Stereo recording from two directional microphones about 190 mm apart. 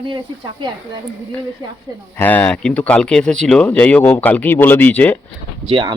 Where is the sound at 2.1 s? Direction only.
10° left (ahead or behind).